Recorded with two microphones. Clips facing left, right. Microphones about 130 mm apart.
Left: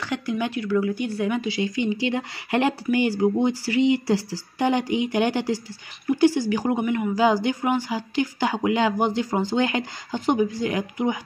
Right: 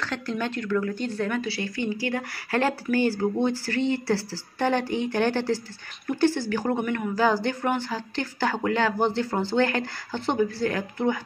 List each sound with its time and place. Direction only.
0.0 s speech: 15° left (ahead or behind)